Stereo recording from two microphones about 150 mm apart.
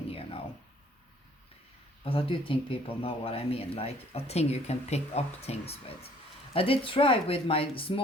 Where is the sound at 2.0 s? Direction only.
40° left (ahead or behind).